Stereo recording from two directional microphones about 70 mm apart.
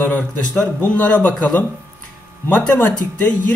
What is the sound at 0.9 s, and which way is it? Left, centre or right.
Speech, left.